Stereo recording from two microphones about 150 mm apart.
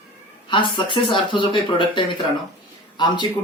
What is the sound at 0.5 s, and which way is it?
Speech, 35° left (ahead or behind).